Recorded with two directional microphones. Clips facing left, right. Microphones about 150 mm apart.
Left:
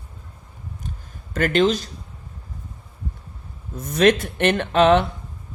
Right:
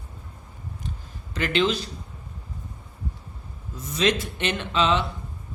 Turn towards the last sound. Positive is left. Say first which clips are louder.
# left 7 dB
turn(degrees=55)  # may be behind; listen again after turning